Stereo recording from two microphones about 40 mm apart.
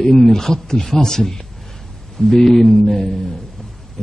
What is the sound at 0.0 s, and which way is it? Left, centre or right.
Speech, centre.